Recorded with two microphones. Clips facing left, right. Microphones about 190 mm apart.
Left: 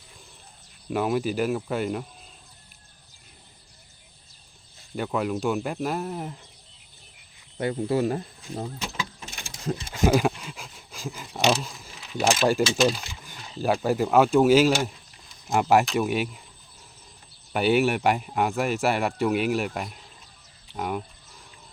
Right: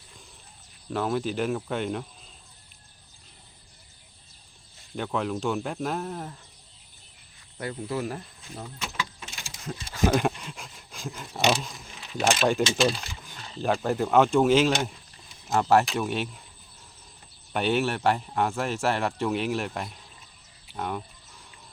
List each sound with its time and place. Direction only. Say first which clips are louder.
0.9 s speech: left 3 dB; 10° left (ahead or behind)
4.9 s speech: left 2 dB; 5° left (ahead or behind)
7.6 s speech: left 7 dB; 25° left (ahead or behind)
10.1 s a sound: left 4 dB; 5° left (ahead or behind)
13.8 s speech: left 1 dB; 5° left (ahead or behind)
17.5 s speech: left 4 dB; 10° left (ahead or behind)